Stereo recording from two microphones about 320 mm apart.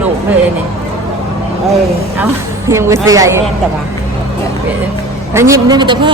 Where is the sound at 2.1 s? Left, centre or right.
Centre.